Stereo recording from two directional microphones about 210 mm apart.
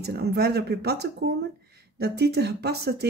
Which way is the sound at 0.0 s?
50° right (ahead or behind).